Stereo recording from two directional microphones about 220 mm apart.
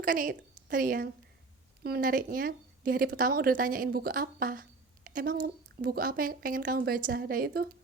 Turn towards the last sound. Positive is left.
turn(degrees=-40)  # may be behind; listen again after turning